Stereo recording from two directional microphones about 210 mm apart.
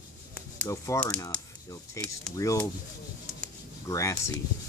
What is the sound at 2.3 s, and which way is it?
Speech, 15° left (ahead or behind).